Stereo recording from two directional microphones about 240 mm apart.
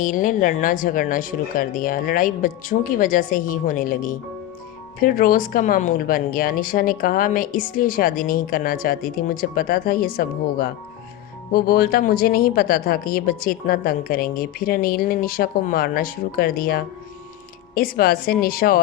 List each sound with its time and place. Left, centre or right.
0.0 s speech: left